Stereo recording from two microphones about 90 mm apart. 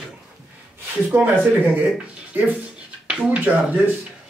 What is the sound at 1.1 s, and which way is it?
Speech, 20° right (ahead or behind).